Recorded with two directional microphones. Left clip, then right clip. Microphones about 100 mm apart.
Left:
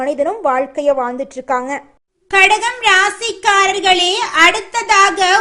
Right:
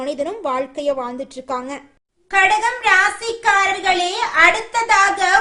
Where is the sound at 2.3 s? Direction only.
20° left (ahead or behind).